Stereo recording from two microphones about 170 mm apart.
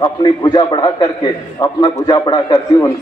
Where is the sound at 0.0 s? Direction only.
25° left (ahead or behind).